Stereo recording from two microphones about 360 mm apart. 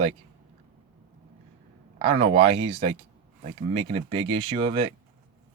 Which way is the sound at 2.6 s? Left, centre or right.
Centre.